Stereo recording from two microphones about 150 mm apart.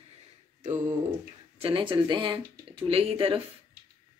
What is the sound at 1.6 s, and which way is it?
A woman's voice, 35° right (ahead or behind).